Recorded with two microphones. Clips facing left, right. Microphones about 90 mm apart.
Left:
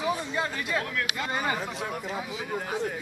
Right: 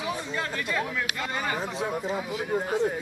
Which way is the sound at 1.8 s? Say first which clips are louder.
Right 4 dB; 20° right (ahead or behind).